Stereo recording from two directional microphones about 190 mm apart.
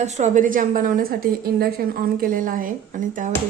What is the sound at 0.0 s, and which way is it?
A woman's voice, 40° right (ahead or behind).